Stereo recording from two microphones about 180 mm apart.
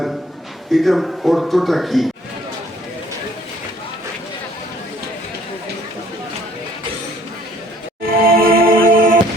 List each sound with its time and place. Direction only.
0.7 s a man's voice: centre (ahead or behind)
8.0 s music: 55° right (ahead or behind)